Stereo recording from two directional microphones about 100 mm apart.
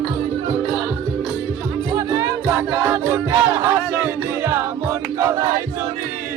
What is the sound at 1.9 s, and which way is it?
Music, 30° right (ahead or behind).